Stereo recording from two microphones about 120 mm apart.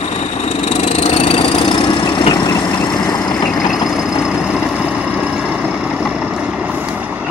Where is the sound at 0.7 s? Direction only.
70° left (ahead or behind); by 3.2 s 35° left (ahead or behind).